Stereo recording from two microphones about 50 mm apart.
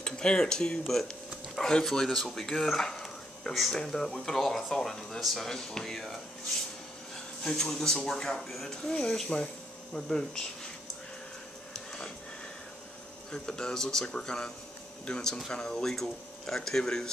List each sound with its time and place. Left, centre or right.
0.0 s speech: centre
5.2 s speech: centre
7.4 s speech: centre
8.4 s speech: centre
8.6 s speech: centre
13.3 s speech: centre